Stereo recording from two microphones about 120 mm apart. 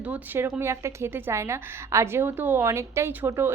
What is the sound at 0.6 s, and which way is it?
A woman's voice, 25° right (ahead or behind).